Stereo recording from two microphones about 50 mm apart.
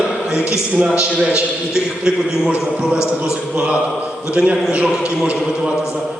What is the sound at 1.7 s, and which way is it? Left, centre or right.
Chant, centre.